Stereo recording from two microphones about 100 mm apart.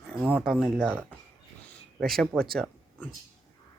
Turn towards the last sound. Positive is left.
turn(degrees=5)  # may be behind; listen again after turning